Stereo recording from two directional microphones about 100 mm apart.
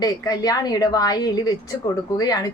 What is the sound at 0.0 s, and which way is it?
A woman's voice, 40° left (ahead or behind).